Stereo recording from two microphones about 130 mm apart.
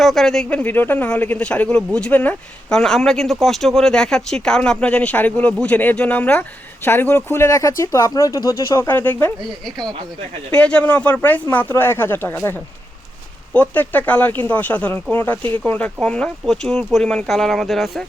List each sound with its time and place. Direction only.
0.0 s speech: centre (ahead or behind)
10.5 s speech: 10° left (ahead or behind)